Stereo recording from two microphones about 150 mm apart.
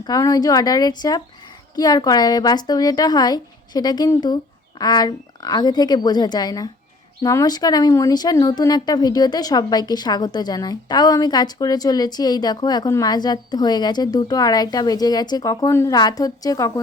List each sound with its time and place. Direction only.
0.0 s speech: 25° left (ahead or behind)